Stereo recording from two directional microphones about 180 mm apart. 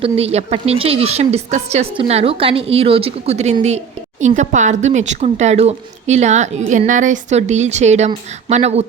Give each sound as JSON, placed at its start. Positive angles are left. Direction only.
{"t": 0.0, "sound": "speech", "side_deg": -35}